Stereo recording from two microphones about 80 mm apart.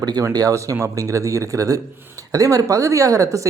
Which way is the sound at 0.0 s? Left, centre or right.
Right.